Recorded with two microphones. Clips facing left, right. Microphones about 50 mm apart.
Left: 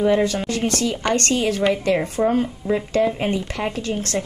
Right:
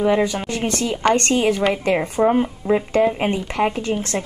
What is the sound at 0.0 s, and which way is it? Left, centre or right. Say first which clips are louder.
Speech: even; centre.